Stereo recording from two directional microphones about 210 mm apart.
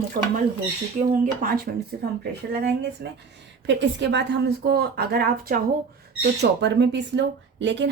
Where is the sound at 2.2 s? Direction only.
50° right (ahead or behind).